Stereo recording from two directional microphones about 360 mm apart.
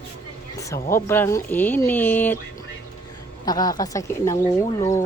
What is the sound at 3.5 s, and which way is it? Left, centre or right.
Speech, centre.